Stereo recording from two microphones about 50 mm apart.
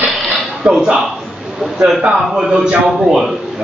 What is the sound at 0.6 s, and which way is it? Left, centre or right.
Speech, centre.